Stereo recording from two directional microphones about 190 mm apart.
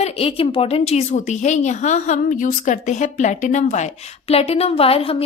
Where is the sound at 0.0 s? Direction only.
30° left (ahead or behind).